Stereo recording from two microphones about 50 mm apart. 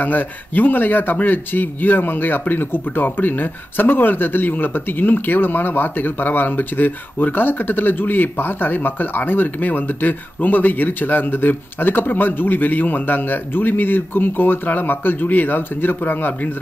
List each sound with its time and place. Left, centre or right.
0.0 s speech: left